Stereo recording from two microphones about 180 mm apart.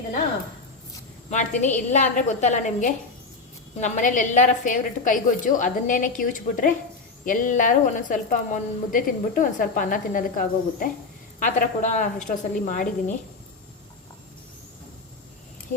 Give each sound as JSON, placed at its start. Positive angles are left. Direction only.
{"t": 1.3, "sound": "a woman's voice", "side_deg": 40}